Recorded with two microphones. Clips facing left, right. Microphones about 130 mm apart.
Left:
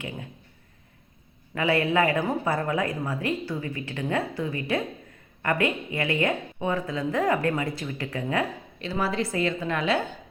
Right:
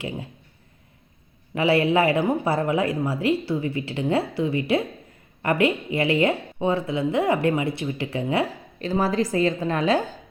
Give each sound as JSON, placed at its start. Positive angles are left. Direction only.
{"t": 1.5, "sound": "speech", "side_deg": -25}
{"t": 8.8, "sound": "a woman's voice", "side_deg": -40}